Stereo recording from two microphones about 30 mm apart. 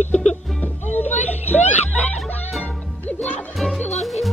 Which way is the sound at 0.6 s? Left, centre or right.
Left.